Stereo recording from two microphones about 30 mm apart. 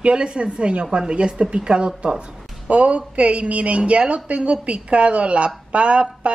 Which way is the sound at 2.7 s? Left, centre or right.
Right.